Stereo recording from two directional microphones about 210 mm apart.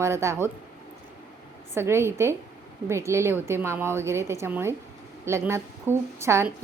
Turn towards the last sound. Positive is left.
turn(degrees=-10)  # may be behind; listen again after turning